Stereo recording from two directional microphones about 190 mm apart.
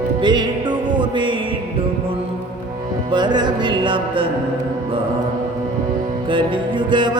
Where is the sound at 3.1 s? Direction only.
25° right (ahead or behind).